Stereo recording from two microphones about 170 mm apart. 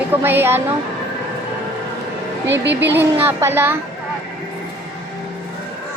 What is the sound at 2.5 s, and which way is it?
Speech, 90° right.